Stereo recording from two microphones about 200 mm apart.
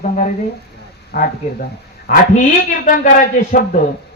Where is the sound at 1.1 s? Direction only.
45° left (ahead or behind).